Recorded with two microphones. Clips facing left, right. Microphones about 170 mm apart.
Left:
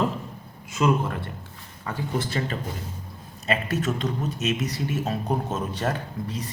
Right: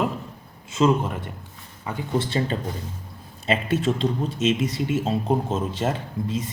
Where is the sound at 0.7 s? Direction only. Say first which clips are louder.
Right 3 dB; 25° right (ahead or behind).